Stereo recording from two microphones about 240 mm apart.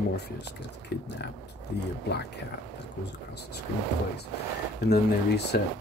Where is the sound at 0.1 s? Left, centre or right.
Left.